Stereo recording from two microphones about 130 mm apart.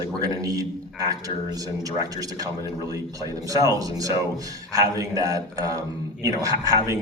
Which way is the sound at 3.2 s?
30° right (ahead or behind).